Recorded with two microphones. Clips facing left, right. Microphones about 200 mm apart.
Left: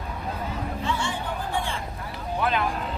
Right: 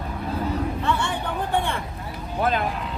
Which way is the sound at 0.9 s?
60° right (ahead or behind).